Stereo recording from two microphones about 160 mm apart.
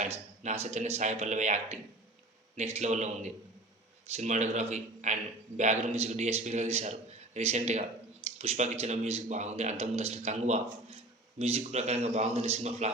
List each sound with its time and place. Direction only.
0.0 s a man's voice: 45° right (ahead or behind)